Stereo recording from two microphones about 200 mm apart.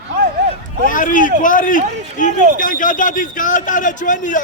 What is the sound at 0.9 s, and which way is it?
A man's voice, 40° left (ahead or behind).